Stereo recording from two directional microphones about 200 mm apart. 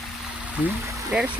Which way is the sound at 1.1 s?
5° right (ahead or behind).